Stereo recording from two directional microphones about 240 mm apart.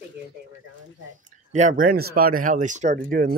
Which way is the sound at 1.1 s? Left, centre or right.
Right.